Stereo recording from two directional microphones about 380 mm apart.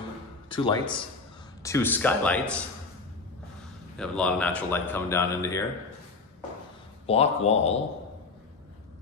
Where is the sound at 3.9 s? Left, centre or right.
Centre.